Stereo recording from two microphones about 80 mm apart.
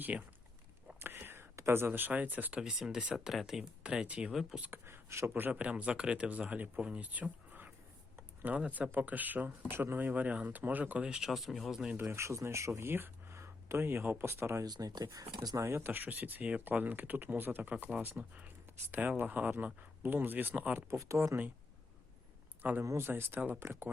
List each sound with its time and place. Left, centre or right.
0.0 s a man's voice: centre
0.9 s a sound: right
1.9 s speech: right
2.6 s a man's voice: centre
4.6 s speech: right
5.3 s a man's voice: centre
11.9 s speech: right
14.6 s speech: right
15.5 s speech: right
21.0 s speech: right
22.8 s speech: right